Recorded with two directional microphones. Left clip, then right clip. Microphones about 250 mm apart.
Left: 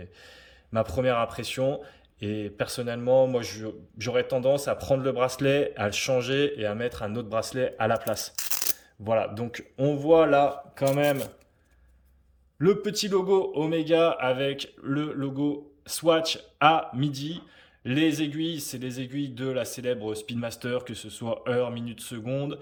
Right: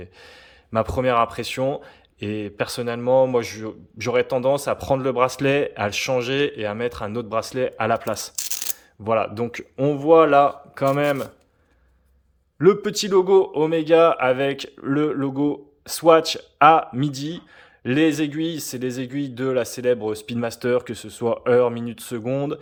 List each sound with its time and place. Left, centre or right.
0.0 s speech: centre
12.5 s speech: centre